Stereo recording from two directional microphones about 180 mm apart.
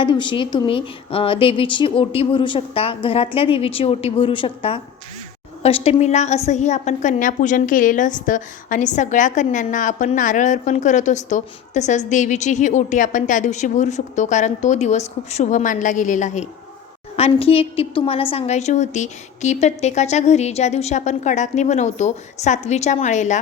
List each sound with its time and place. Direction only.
0.0 s a woman's voice: 25° left (ahead or behind)